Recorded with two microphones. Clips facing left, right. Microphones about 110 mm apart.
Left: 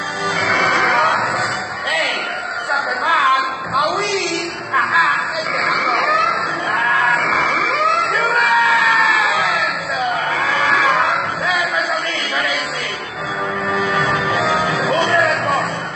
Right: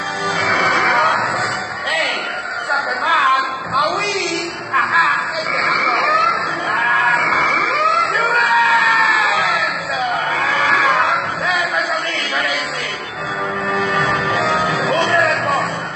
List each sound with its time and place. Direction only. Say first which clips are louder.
0.4 s neigh: even; centre (ahead or behind)
1.9 s music: even; centre (ahead or behind)
6.9 s a sound: right 1 dB; centre (ahead or behind)
13.7 s music: even; centre (ahead or behind)